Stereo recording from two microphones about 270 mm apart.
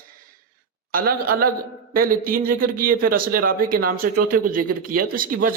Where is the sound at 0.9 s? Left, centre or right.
Right.